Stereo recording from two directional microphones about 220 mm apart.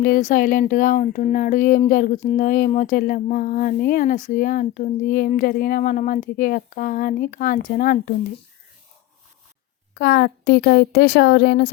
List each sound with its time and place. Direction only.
0.0 s speech: 35° left (ahead or behind)
9.9 s speech: 45° left (ahead or behind)